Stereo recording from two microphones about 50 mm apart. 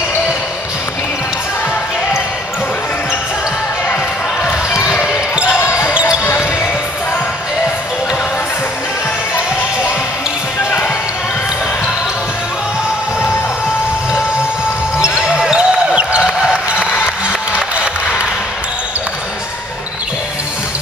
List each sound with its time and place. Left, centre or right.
5.0 s basketball bounce: right
15.2 s basketball bounce: centre
16.2 s a sound: centre